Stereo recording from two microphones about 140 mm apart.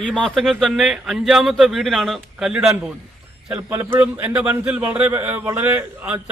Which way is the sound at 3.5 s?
15° right (ahead or behind).